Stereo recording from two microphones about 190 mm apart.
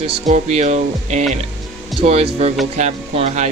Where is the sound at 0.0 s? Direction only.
35° right (ahead or behind).